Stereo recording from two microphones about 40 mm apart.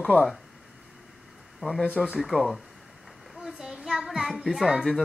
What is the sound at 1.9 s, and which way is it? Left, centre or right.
Speech, right.